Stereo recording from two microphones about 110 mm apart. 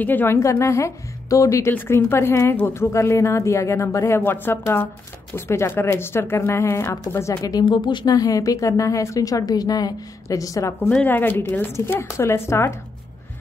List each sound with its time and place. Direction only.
0.0 s speech: 15° left (ahead or behind)
7.6 s a woman's voice: 45° left (ahead or behind); by 10.9 s 30° left (ahead or behind)
10.9 s speech: 15° left (ahead or behind)